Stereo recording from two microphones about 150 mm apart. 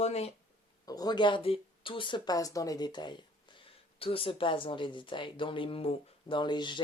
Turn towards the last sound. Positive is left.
turn(degrees=30)  # may be behind; listen again after turning